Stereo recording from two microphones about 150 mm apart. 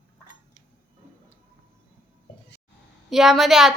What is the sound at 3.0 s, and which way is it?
Speech, centre (ahead or behind).